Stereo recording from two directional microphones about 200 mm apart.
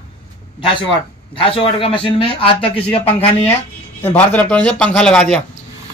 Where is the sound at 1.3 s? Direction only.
25° left (ahead or behind).